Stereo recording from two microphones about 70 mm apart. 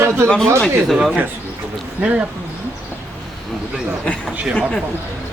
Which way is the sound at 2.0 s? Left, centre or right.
Centre.